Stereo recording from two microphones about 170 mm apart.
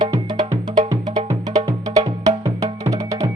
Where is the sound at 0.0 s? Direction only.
25° right (ahead or behind).